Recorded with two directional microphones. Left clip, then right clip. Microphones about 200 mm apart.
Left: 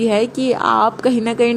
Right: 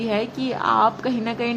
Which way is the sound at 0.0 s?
25° left (ahead or behind).